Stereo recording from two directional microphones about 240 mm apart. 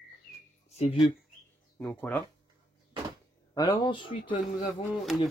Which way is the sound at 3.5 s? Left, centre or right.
Centre.